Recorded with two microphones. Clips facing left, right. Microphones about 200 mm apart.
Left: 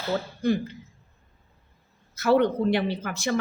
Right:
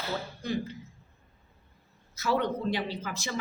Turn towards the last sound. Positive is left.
turn(degrees=60)  # may be behind; listen again after turning